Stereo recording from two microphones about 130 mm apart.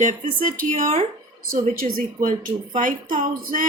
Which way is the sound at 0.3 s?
90° right.